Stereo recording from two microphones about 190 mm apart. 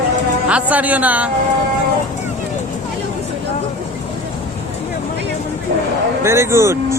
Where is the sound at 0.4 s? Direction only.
5° right (ahead or behind).